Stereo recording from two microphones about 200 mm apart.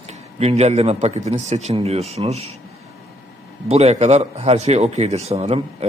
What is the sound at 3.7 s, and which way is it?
Speech, 30° right (ahead or behind).